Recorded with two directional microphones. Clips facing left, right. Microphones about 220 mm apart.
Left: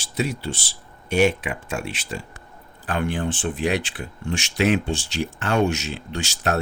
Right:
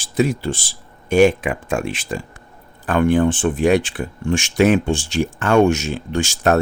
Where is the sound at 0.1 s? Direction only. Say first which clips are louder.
Right 7 dB; 50° right (ahead or behind).